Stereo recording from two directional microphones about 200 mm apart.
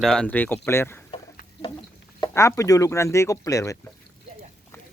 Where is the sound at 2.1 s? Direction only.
15° left (ahead or behind).